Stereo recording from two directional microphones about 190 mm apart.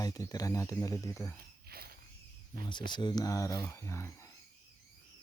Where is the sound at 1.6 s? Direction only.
55° right (ahead or behind).